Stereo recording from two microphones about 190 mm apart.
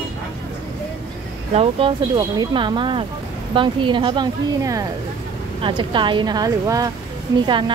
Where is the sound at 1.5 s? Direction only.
30° right (ahead or behind).